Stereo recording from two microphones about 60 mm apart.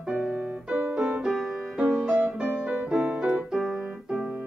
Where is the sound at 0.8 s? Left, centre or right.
Right.